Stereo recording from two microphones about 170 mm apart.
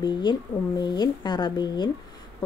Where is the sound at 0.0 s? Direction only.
25° left (ahead or behind).